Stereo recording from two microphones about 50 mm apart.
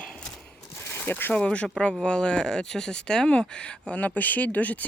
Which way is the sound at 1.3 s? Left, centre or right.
Left.